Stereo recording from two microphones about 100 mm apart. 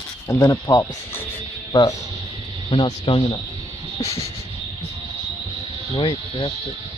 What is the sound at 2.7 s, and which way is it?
Speech, 60° left (ahead or behind).